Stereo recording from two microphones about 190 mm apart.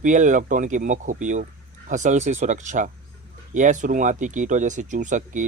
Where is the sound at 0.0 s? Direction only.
40° right (ahead or behind).